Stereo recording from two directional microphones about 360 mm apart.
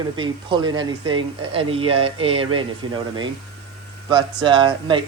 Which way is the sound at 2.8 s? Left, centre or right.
Right.